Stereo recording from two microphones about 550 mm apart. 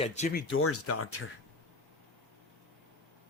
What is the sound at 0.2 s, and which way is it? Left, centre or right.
Speech, centre.